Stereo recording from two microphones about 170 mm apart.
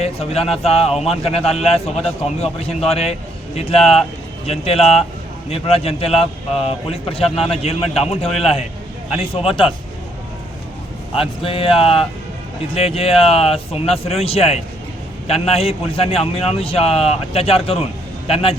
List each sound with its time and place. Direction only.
0.0 s a man's voice: 35° left (ahead or behind)
0.9 s a man's voice: centre (ahead or behind)
1.1 s a man's voice: 35° left (ahead or behind)
11.2 s a man's voice: 35° left (ahead or behind)